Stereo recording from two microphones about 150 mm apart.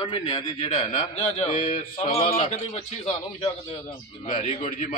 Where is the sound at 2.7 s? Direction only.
40° left (ahead or behind).